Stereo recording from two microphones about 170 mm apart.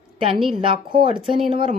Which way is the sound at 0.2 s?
30° right (ahead or behind).